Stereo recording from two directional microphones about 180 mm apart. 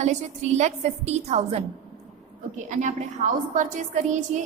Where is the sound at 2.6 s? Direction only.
40° right (ahead or behind).